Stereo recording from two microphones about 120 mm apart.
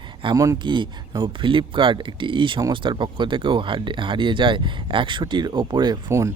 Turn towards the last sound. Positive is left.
turn(degrees=-25)  # may be behind; listen again after turning